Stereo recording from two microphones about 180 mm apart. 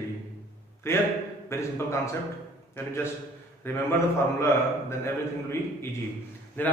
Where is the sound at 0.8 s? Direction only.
15° left (ahead or behind).